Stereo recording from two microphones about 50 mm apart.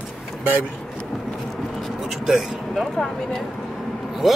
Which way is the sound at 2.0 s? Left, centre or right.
Centre.